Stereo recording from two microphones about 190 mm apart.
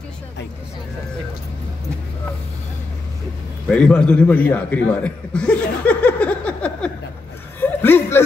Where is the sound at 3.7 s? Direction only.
5° left (ahead or behind).